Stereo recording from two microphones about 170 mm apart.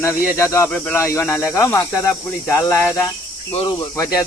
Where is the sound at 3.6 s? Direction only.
30° left (ahead or behind).